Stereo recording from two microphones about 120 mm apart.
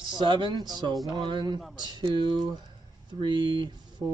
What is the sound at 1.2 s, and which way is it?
Speech, 40° right (ahead or behind).